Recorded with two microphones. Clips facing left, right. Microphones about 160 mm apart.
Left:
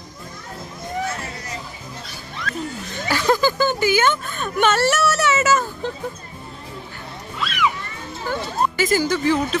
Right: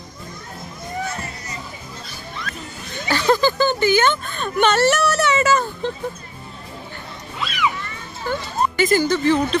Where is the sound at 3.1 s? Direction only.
10° left (ahead or behind).